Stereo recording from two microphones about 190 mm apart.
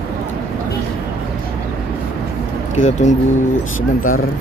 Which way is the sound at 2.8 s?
40° left (ahead or behind).